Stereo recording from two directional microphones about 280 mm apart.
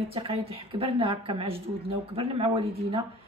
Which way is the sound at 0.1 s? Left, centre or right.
Centre.